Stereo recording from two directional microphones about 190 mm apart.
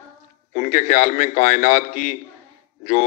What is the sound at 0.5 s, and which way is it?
A man's voice, 40° left (ahead or behind).